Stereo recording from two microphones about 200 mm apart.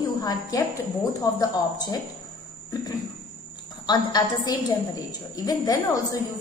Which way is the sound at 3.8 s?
20° left (ahead or behind).